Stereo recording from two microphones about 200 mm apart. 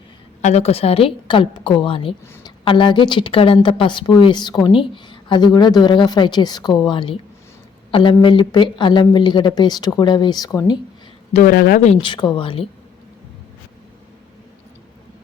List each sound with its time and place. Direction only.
0.4 s speech: 30° left (ahead or behind)
11.3 s speech: 45° left (ahead or behind); by 12.6 s 25° left (ahead or behind)